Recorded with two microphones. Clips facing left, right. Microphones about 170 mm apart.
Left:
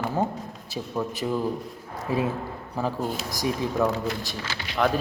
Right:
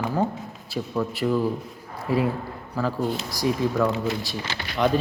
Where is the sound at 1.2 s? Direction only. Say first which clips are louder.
Right 5 dB; 15° left (ahead or behind).